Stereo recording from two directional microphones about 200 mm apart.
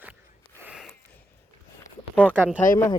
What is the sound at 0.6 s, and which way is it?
Gasp, 5° right (ahead or behind).